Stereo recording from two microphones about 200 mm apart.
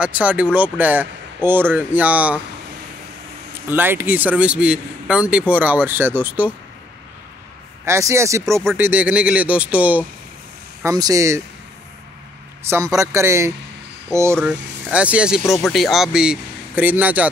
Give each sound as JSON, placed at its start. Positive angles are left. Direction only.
{"t": 0.0, "sound": "speech", "side_deg": -5}
{"t": 3.6, "sound": "speech", "side_deg": -10}
{"t": 7.8, "sound": "speech", "side_deg": -15}
{"t": 12.6, "sound": "speech", "side_deg": -15}